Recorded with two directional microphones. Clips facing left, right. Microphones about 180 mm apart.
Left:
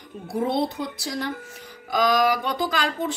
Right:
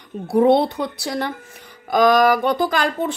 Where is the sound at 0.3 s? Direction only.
70° right (ahead or behind).